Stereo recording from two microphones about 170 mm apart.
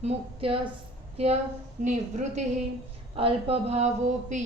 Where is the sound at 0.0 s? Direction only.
35° right (ahead or behind).